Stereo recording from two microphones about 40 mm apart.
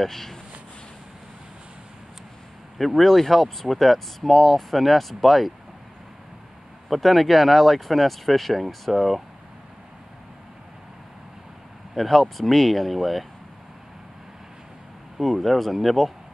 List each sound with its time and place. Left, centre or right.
0.0 s speech: centre
2.8 s speech: centre
6.9 s speech: centre
11.9 s speech: centre
15.1 s speech: centre